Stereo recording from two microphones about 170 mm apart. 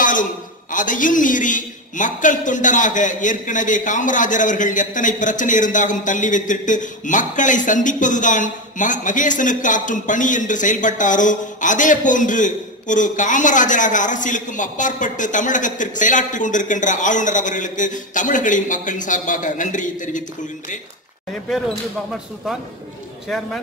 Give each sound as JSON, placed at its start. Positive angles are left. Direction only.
{"t": 0.0, "sound": "a man's voice", "side_deg": 50}
{"t": 23.2, "sound": "a man's voice", "side_deg": 5}